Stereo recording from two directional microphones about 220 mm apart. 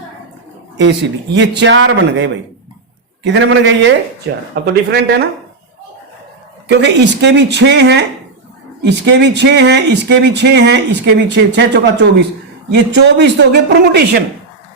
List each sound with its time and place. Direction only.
1.4 s a man's voice: 55° right (ahead or behind)
6.7 s speech: 50° right (ahead or behind)